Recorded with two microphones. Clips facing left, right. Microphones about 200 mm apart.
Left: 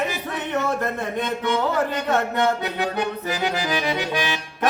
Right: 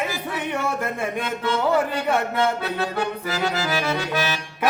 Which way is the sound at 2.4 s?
15° left (ahead or behind).